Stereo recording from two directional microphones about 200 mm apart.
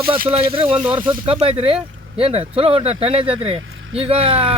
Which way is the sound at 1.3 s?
30° right (ahead or behind).